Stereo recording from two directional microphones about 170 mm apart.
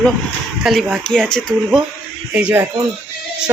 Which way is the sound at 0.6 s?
Centre (ahead or behind).